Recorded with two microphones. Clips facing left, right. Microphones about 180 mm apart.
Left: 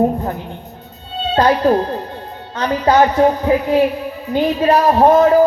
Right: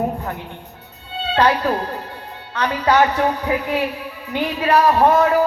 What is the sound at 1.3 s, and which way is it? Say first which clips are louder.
Music: left 4 dB; 30° left (ahead or behind).